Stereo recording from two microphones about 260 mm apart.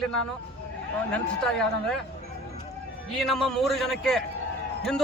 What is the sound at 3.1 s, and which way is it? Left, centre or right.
A man's voice, centre.